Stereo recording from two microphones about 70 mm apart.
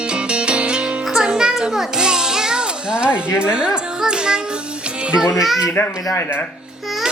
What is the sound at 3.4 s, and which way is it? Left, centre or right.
A child's voice, centre.